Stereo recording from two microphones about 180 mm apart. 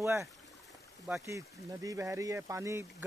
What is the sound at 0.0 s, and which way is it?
Speech, 15° right (ahead or behind).